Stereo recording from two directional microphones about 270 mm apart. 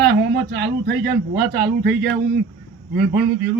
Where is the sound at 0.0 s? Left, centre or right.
Right.